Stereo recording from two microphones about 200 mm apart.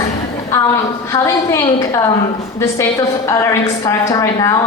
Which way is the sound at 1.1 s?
15° left (ahead or behind).